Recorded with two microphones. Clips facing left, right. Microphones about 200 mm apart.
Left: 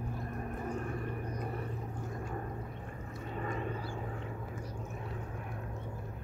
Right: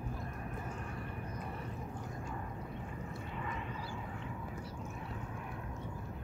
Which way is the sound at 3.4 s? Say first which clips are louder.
Left 7 dB; 40° left (ahead or behind).